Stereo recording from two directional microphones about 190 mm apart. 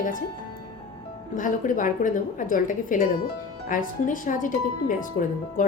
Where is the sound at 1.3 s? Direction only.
45° left (ahead or behind).